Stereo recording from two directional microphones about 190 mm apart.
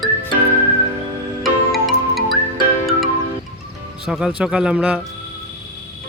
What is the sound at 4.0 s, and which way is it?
Speech, 5° right (ahead or behind).